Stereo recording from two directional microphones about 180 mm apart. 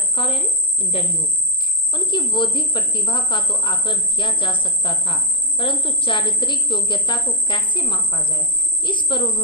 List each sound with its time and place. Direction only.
0.1 s a woman's voice: 30° left (ahead or behind)